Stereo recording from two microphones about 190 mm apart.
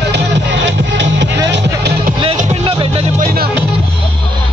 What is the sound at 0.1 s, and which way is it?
Music, 70° right (ahead or behind).